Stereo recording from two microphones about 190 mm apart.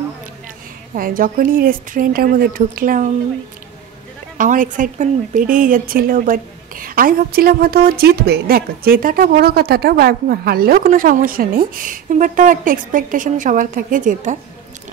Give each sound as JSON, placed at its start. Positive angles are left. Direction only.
{"t": 0.9, "sound": "speech", "side_deg": -50}
{"t": 4.4, "sound": "speech", "side_deg": -45}